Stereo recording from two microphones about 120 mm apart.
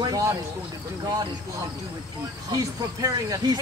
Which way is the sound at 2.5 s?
30° right (ahead or behind).